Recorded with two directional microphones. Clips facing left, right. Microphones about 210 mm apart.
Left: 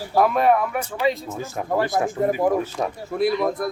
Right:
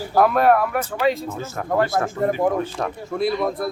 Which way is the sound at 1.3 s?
15° left (ahead or behind).